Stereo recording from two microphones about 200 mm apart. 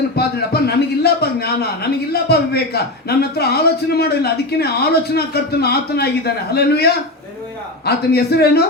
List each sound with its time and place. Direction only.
0.2 s a man's voice: 50° left (ahead or behind)